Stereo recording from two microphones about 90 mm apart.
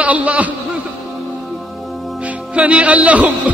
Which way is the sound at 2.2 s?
15° right (ahead or behind).